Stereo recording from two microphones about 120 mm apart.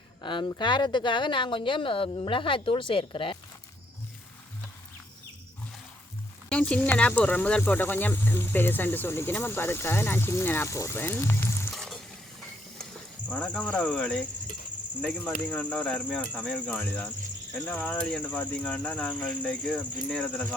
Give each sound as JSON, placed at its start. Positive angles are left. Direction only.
{"t": 0.2, "sound": "speech", "side_deg": 40}
{"t": 6.5, "sound": "speech", "side_deg": 10}
{"t": 11.7, "sound": "water", "side_deg": 5}
{"t": 12.8, "sound": "speech", "side_deg": 10}